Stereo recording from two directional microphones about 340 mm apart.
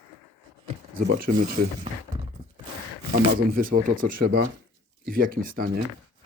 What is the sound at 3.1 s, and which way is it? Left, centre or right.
Speech, right.